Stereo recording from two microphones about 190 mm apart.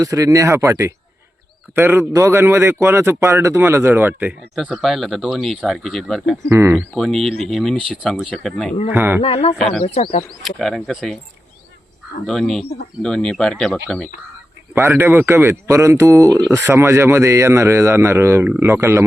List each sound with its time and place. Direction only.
0.0 s a man's voice: 15° right (ahead or behind); by 6.4 s centre (ahead or behind)
6.5 s a man's voice: 15° right (ahead or behind)
6.7 s speech: centre (ahead or behind)
8.9 s a man's voice: 10° right (ahead or behind)
9.2 s speech: 30° left (ahead or behind)
9.6 s speech: 5° left (ahead or behind)
9.8 s speech: 35° left (ahead or behind)
10.4 s speech: centre (ahead or behind)
12.2 s speech: centre (ahead or behind)
14.8 s a man's voice: 10° right (ahead or behind)